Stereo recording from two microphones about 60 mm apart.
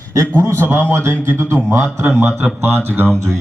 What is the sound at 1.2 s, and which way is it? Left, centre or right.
A man's voice, right.